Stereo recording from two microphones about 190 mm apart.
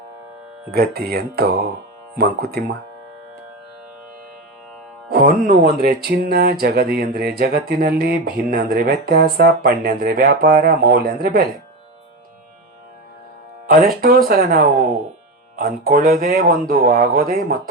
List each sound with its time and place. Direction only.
0.7 s speech: 55° right (ahead or behind)
5.5 s speech: 55° right (ahead or behind)
13.7 s speech: 50° right (ahead or behind)